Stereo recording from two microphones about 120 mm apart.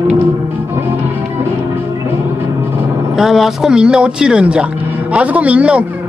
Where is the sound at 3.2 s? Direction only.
5° right (ahead or behind).